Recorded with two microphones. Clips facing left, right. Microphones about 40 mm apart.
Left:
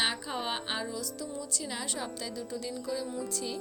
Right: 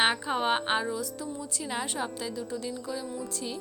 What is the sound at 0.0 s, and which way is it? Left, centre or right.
A woman's voice, right.